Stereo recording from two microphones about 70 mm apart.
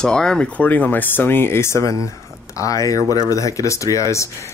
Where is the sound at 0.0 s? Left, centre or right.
Centre.